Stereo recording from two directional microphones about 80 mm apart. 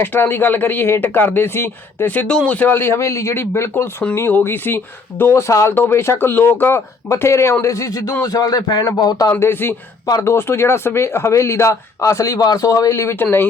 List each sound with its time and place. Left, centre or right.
0.0 s speech: left
2.1 s speech: centre; by 9.3 s left
9.4 s speech: left